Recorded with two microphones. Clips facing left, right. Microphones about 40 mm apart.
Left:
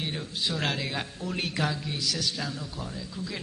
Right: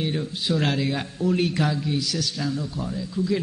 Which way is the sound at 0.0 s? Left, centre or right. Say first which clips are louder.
Right 5 dB; centre.